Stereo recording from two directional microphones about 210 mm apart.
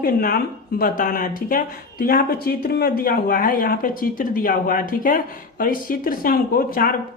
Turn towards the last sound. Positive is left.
turn(degrees=45)  # may be behind; listen again after turning